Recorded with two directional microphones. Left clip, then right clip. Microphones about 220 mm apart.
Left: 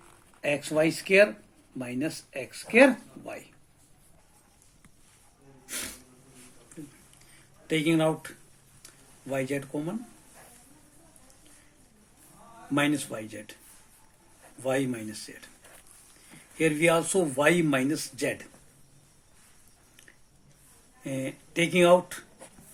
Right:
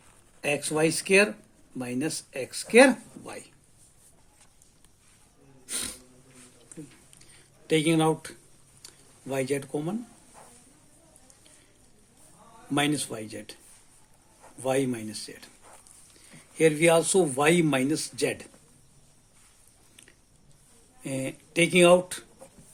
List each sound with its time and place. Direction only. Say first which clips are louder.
0.4 s speech: even; 45° right (ahead or behind)
7.7 s speech: right 2 dB; 45° right (ahead or behind)
9.3 s speech: right 2 dB; 45° right (ahead or behind)
12.7 s speech: even; 45° right (ahead or behind)
14.6 s speech: right 2 dB; 45° right (ahead or behind)
16.6 s speech: right 3 dB; 45° right (ahead or behind)
21.0 s speech: right 1 dB; 45° right (ahead or behind)